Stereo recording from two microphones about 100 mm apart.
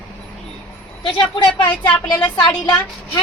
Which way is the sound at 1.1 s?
55° left (ahead or behind).